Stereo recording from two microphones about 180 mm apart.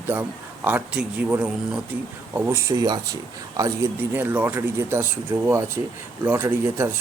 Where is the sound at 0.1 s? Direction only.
10° right (ahead or behind).